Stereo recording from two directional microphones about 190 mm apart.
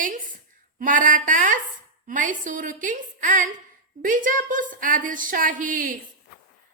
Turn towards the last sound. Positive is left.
turn(degrees=-45)  # may be behind; listen again after turning